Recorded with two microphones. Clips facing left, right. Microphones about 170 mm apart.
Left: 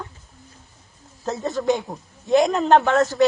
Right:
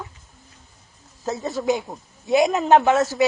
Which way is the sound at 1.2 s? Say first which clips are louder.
Left 1 dB; centre (ahead or behind).